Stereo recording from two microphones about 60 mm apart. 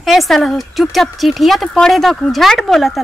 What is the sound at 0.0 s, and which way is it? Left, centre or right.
Speech, centre.